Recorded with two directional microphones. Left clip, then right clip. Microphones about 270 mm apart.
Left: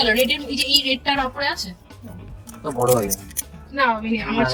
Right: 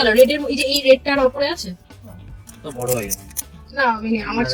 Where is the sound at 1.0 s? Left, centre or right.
Centre.